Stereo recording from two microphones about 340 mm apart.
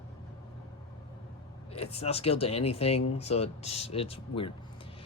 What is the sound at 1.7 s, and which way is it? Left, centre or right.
Speech, centre.